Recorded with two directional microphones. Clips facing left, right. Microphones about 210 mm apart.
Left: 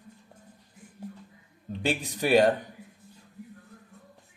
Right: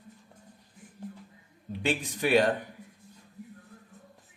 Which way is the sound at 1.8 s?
40° left (ahead or behind).